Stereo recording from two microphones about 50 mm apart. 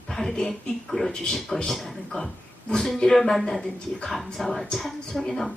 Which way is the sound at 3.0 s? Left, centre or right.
Centre.